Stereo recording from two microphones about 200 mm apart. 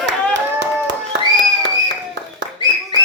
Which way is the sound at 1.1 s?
65° right (ahead or behind).